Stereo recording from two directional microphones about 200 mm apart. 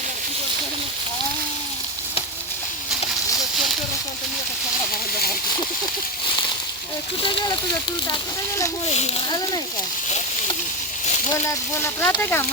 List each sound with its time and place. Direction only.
7.2 s speech: 20° left (ahead or behind)
8.9 s a child's voice: 30° left (ahead or behind)
11.3 s speech: 15° left (ahead or behind)